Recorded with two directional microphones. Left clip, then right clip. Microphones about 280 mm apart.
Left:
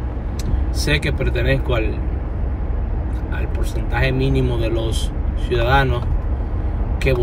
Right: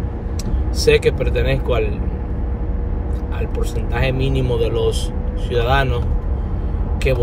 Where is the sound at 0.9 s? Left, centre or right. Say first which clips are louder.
Right 5 dB; right.